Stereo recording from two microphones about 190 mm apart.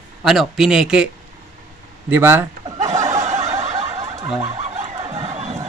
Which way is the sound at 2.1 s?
10° right (ahead or behind).